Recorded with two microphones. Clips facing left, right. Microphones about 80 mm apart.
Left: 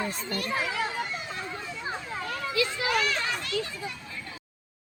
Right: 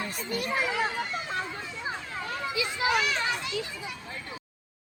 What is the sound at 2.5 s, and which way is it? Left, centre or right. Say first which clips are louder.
A child's voice: even; centre.